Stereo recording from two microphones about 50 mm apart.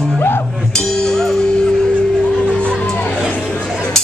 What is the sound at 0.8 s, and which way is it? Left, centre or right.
Music, centre.